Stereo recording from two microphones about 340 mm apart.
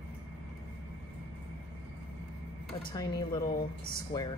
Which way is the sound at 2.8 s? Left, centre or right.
Centre.